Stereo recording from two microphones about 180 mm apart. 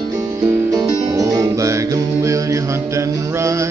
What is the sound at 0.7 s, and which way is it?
Music, 20° right (ahead or behind).